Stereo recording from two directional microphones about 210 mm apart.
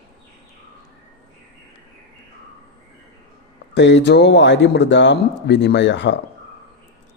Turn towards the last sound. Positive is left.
turn(degrees=55)  # may be behind; listen again after turning